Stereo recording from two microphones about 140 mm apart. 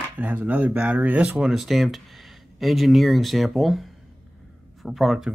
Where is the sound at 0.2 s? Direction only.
10° right (ahead or behind).